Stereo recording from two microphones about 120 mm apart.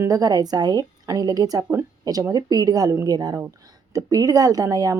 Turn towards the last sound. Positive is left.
turn(degrees=-25)  # may be behind; listen again after turning